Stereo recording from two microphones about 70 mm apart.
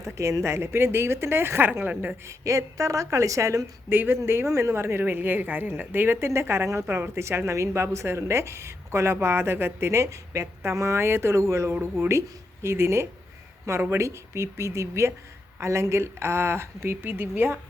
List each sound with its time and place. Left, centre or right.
0.0 s a woman's voice: right
1.9 s a woman's voice: right
2.2 s a woman's voice: right
3.8 s a woman's voice: right
6.8 s a woman's voice: right